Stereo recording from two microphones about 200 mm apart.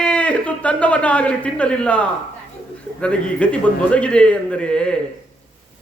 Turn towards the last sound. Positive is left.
turn(degrees=5)  # may be behind; listen again after turning